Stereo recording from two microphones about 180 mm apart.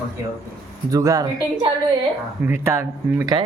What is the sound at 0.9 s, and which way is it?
A woman's voice, 20° right (ahead or behind).